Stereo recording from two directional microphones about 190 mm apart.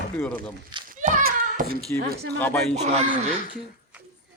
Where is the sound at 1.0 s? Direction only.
45° right (ahead or behind).